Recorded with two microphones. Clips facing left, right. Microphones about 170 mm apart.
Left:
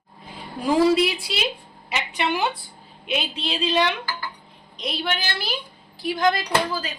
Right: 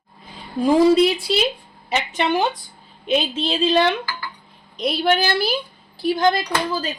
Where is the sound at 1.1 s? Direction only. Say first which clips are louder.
Right 7 dB; centre (ahead or behind).